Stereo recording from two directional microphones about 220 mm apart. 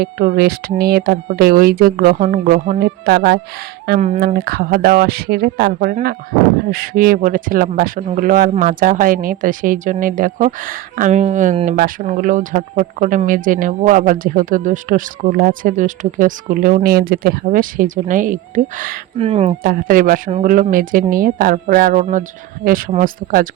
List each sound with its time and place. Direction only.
0.0 s speech: 45° right (ahead or behind)
4.0 s speech: 35° right (ahead or behind)
19.6 s speech: 40° right (ahead or behind)